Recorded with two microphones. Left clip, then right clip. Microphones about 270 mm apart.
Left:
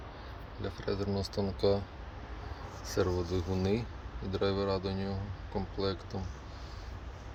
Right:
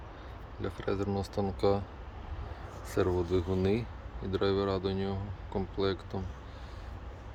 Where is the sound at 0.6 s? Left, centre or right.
Centre.